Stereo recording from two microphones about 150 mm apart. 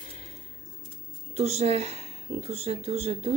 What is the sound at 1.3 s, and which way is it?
A woman's voice, 45° right (ahead or behind).